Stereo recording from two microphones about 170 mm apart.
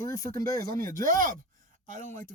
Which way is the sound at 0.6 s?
60° right (ahead or behind).